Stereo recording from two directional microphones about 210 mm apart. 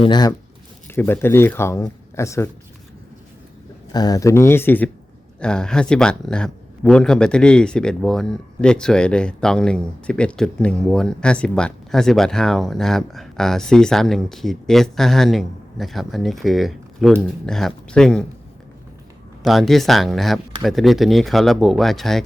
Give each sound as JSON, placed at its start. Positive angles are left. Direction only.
{"t": 0.0, "sound": "speech", "side_deg": 20}
{"t": 3.9, "sound": "speech", "side_deg": 15}
{"t": 19.4, "sound": "speech", "side_deg": 0}